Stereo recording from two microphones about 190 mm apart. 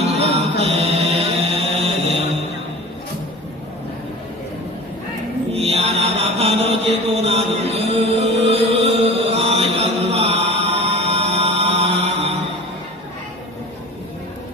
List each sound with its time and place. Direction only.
0.0 s music: 35° right (ahead or behind)
5.5 s mantra: 35° right (ahead or behind)